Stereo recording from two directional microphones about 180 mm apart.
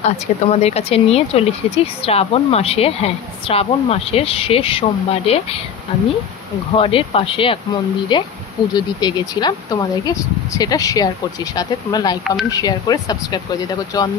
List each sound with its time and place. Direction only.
0.0 s speech: 35° left (ahead or behind)
6.8 s speech: 30° left (ahead or behind)